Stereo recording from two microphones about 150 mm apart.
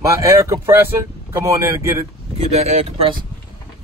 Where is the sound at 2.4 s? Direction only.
45° right (ahead or behind).